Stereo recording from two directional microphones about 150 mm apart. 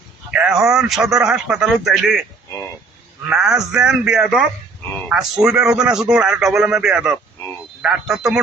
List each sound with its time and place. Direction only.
0.3 s a man's voice: 5° right (ahead or behind)
3.2 s a man's voice: 5° right (ahead or behind)